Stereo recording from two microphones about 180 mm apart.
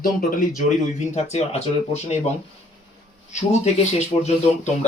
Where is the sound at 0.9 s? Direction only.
35° left (ahead or behind).